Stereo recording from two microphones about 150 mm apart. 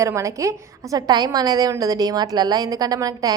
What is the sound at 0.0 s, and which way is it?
A woman's voice, 20° right (ahead or behind).